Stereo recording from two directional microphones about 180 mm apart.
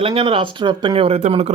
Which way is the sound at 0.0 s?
30° right (ahead or behind).